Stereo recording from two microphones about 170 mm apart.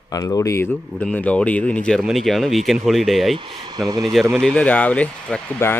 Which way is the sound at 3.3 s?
25° right (ahead or behind).